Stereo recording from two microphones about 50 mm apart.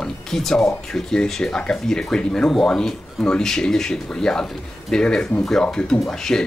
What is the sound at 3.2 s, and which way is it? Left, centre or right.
Speech, centre.